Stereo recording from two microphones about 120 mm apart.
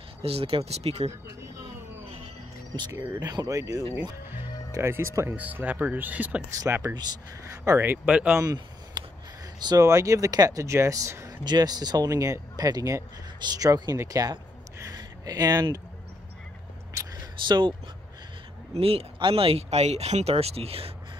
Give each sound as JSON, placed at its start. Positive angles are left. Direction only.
{"t": 0.2, "sound": "speech", "side_deg": -55}
{"t": 2.7, "sound": "speech", "side_deg": -40}
{"t": 3.0, "sound": "speech", "side_deg": -30}
{"t": 6.6, "sound": "speech", "side_deg": -30}
{"t": 8.4, "sound": "a sound", "side_deg": -35}
{"t": 9.6, "sound": "speech", "side_deg": -30}
{"t": 16.9, "sound": "a sound", "side_deg": -35}
{"t": 18.7, "sound": "speech", "side_deg": -55}